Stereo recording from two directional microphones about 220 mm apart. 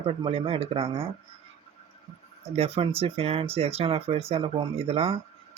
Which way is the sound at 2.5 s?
25° right (ahead or behind).